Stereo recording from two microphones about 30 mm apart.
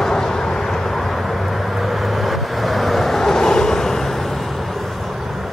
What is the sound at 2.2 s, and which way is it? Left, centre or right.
Vehicle, centre.